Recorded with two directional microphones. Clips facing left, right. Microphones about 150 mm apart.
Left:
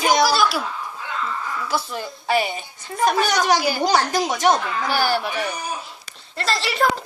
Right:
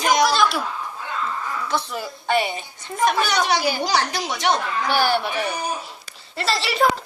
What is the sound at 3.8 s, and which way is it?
Speech, 45° left (ahead or behind).